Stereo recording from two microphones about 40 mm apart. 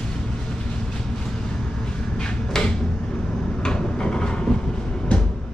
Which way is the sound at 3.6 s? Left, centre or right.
Left.